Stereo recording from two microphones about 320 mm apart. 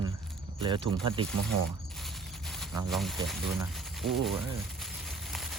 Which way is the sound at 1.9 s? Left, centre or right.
Centre.